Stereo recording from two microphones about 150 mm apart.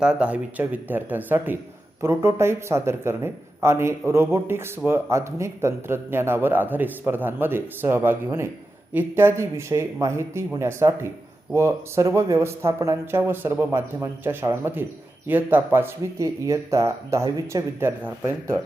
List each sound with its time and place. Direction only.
0.0 s speech: 5° right (ahead or behind)